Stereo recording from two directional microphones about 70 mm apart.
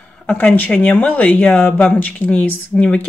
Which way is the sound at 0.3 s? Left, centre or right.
Left.